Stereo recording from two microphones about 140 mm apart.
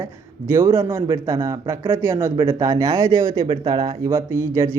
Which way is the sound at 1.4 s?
20° right (ahead or behind).